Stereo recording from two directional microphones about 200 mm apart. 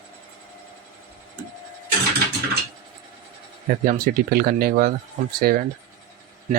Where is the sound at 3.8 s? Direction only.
45° right (ahead or behind).